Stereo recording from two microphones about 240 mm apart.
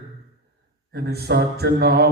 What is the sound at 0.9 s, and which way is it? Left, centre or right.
Mantra, right.